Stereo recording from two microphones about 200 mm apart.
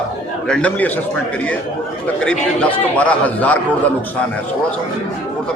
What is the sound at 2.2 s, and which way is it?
A man's voice, 5° left (ahead or behind).